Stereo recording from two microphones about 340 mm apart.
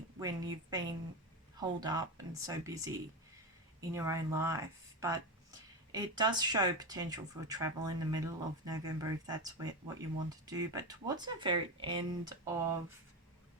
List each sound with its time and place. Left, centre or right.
0.2 s speech: centre